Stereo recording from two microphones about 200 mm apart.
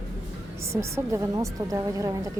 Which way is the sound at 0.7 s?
15° right (ahead or behind).